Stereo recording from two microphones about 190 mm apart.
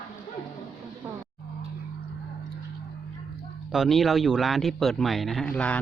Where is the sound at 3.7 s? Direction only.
Centre (ahead or behind).